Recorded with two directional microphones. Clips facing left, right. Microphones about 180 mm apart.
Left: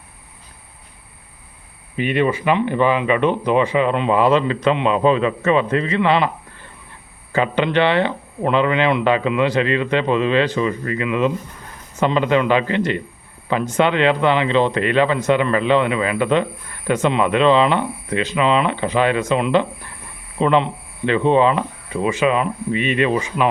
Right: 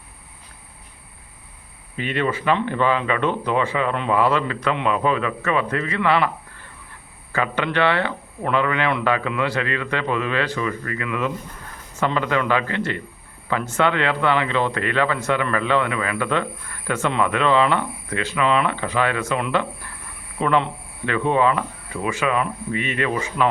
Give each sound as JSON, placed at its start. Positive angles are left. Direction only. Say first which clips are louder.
{"t": 2.0, "sound": "speech", "louder": "left 5 dB", "side_deg": 15}
{"t": 7.3, "sound": "speech", "louder": "left 5 dB", "side_deg": 20}